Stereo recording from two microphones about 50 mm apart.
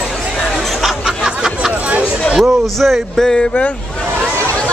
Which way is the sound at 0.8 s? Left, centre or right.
Centre.